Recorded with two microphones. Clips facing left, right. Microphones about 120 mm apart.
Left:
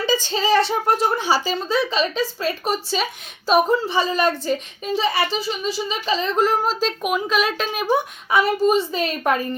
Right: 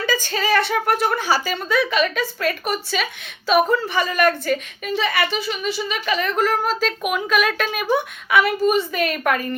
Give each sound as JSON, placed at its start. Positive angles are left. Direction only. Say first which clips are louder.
{"t": 0.3, "sound": "a woman's voice", "louder": "left 2 dB", "side_deg": 25}